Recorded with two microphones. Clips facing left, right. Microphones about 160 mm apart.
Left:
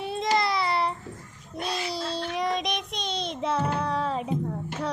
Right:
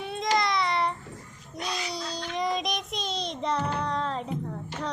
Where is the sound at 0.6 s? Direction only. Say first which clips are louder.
Left 1 dB; 30° left (ahead or behind).